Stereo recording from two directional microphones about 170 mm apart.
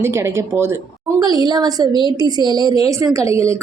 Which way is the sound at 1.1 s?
25° right (ahead or behind).